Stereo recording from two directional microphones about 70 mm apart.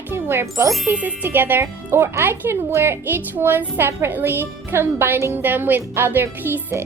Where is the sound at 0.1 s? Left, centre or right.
Right.